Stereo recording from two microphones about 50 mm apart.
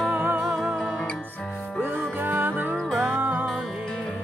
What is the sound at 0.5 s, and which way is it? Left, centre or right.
Music, centre.